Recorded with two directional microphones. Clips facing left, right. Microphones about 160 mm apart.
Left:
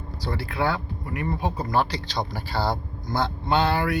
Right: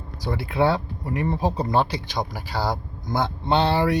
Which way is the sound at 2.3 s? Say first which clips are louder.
Left 2 dB; 10° right (ahead or behind).